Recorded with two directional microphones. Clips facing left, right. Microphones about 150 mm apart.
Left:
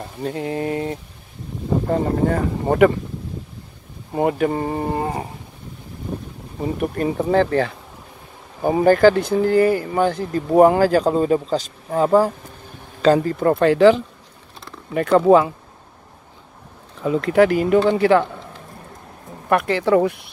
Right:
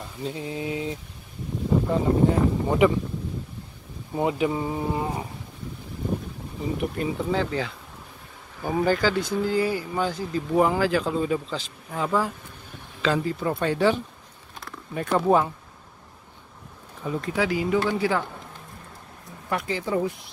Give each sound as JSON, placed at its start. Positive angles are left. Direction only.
{"t": 0.0, "sound": "speech", "side_deg": 65}
{"t": 2.2, "sound": "speech", "side_deg": 60}
{"t": 4.1, "sound": "speech", "side_deg": 55}
{"t": 6.6, "sound": "speech", "side_deg": 55}
{"t": 13.7, "sound": "speech", "side_deg": 90}
{"t": 17.0, "sound": "speech", "side_deg": 85}
{"t": 19.5, "sound": "speech", "side_deg": 70}